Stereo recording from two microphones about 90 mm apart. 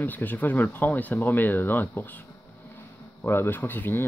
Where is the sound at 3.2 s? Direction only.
25° left (ahead or behind).